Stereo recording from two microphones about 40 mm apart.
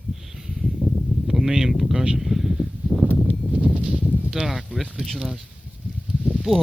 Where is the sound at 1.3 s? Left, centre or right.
Centre.